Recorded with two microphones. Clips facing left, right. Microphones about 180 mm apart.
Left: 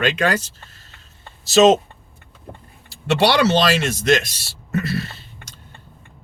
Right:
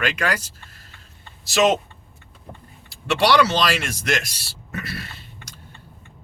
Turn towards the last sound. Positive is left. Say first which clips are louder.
# left 7 dB
turn(degrees=25)  # may be behind; listen again after turning